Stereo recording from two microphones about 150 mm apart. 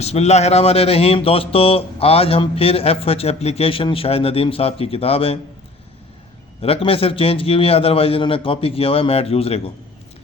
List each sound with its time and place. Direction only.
0.0 s speech: 45° left (ahead or behind)
6.6 s speech: 40° left (ahead or behind)